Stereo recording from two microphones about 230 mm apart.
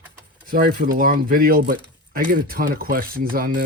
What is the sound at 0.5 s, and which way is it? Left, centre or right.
Speech, right.